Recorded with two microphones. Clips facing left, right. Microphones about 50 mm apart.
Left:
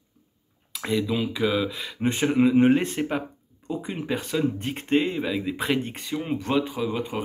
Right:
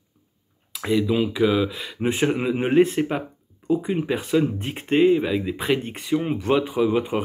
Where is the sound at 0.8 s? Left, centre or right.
Centre.